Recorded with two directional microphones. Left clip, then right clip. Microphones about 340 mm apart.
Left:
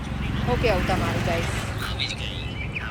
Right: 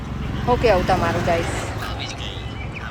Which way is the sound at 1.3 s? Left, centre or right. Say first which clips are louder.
Right 5 dB; right.